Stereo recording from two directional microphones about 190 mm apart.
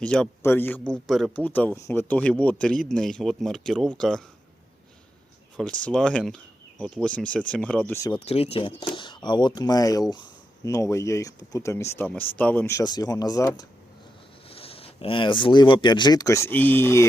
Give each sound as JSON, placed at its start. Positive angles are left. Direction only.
{"t": 0.0, "sound": "a man's voice", "side_deg": 5}
{"t": 5.8, "sound": "speech", "side_deg": 5}
{"t": 8.1, "sound": "speech", "side_deg": 30}
{"t": 14.5, "sound": "speech", "side_deg": 30}